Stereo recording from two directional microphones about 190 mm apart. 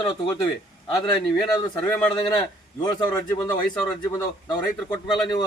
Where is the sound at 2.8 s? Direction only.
20° left (ahead or behind).